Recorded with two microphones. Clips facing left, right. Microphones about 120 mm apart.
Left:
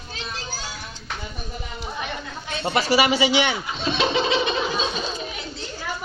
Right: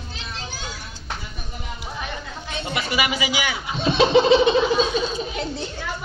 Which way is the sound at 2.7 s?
30° left (ahead or behind).